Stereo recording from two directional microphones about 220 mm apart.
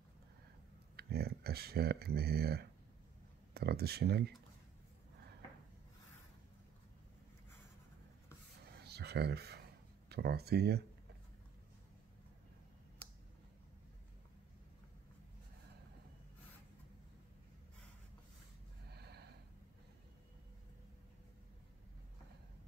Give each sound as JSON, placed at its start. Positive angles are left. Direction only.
{"t": 0.9, "sound": "speech", "side_deg": -45}
{"t": 8.8, "sound": "a sound", "side_deg": -50}
{"t": 10.0, "sound": "speech", "side_deg": -45}
{"t": 18.9, "sound": "snort", "side_deg": -50}